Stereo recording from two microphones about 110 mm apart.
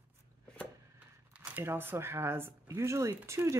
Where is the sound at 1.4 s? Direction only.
20° right (ahead or behind).